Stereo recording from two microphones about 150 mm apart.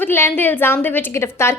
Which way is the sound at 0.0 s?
15° left (ahead or behind).